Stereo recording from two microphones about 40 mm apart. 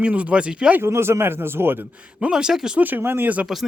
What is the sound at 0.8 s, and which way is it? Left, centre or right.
Speech, right.